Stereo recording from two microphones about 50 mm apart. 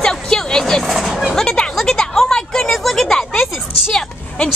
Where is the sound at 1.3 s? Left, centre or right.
Centre.